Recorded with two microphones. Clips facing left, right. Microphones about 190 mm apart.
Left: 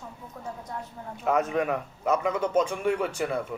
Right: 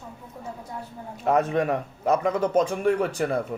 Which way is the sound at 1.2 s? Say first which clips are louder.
Right 3 dB; 30° right (ahead or behind).